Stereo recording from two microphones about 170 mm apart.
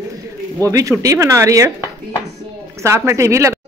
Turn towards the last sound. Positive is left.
turn(degrees=-15)  # may be behind; listen again after turning